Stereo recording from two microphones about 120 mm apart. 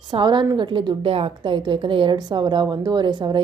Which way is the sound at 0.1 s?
40° right (ahead or behind).